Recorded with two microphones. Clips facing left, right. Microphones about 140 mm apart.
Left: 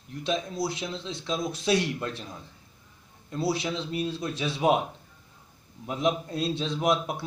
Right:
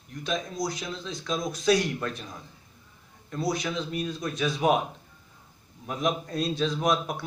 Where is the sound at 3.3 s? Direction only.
30° left (ahead or behind).